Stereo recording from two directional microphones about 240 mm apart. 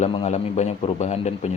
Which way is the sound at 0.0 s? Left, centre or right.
Left.